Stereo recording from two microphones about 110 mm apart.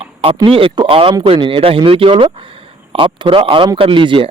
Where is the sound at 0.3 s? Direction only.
50° right (ahead or behind).